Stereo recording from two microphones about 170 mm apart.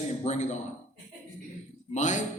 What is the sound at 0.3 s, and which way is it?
Speech, 45° left (ahead or behind).